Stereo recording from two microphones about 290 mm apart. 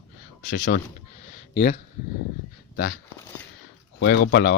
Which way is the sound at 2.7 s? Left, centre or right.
Left.